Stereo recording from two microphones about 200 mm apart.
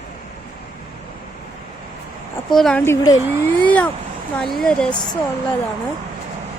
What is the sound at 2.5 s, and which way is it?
Speech, centre (ahead or behind).